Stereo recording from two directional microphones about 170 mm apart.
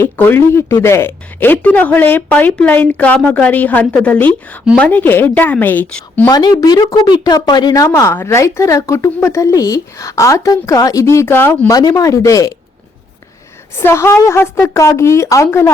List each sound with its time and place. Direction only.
0.0 s speech: 10° left (ahead or behind)
6.2 s speech: 25° left (ahead or behind)
13.7 s speech: 15° left (ahead or behind)